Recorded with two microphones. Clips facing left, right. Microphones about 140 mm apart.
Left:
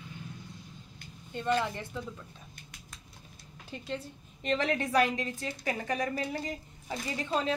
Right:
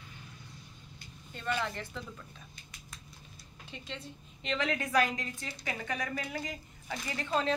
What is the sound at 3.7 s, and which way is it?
Speech, 40° left (ahead or behind).